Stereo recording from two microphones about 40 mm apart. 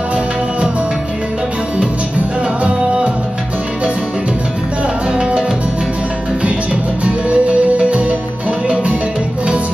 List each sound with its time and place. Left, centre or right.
5.1 s music: right
6.4 s music: right